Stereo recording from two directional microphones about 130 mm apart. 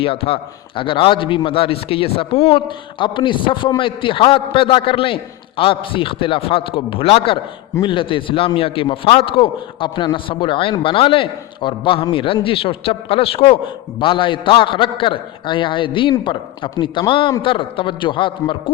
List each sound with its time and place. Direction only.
0.0 s a man's voice: 45° left (ahead or behind)